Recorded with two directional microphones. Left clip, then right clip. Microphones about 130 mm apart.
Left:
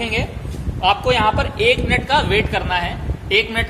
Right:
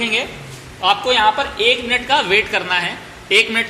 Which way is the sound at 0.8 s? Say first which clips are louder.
Right 1 dB; 5° right (ahead or behind).